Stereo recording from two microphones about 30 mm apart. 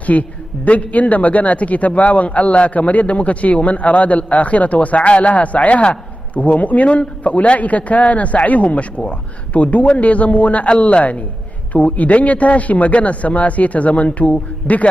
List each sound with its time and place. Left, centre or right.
0.0 s a man's voice: left
14.7 s a man's voice: left